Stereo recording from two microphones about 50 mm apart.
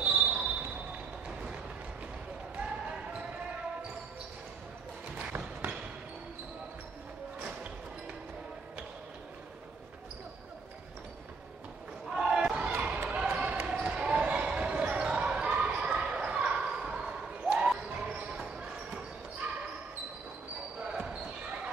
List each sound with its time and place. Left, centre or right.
0.0 s basketball bounce: right
5.3 s a sound: right
12.1 s basketball bounce: centre
20.8 s basketball bounce: right